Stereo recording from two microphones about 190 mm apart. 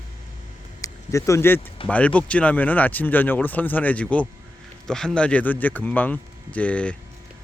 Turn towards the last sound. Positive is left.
turn(degrees=5)  # may be behind; listen again after turning